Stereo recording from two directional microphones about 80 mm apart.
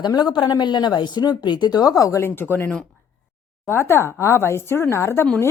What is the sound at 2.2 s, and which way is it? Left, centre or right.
Speech, left.